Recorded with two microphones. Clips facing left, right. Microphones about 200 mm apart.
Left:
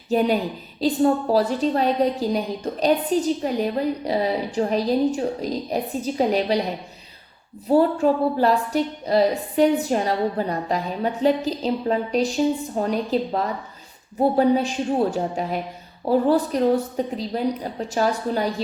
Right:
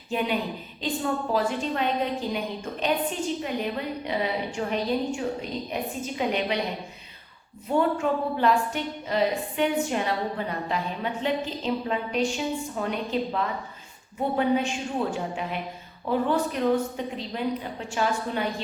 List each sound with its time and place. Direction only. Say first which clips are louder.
0.1 s a woman's voice: left 7 dB; 40° left (ahead or behind)
7.7 s a woman's voice: left 6 dB; 35° left (ahead or behind)